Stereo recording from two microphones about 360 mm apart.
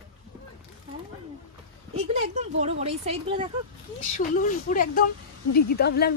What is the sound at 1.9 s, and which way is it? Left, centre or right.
Speech, centre.